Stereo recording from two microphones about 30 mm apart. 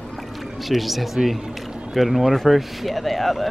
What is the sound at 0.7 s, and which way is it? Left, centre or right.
Speech, centre.